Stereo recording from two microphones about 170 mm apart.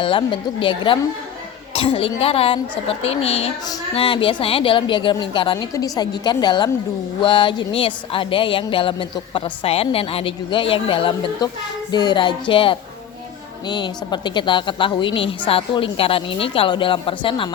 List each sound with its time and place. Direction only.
0.0 s a woman's voice: 30° left (ahead or behind)